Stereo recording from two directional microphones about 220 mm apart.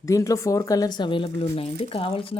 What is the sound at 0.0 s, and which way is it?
Speech, 15° left (ahead or behind).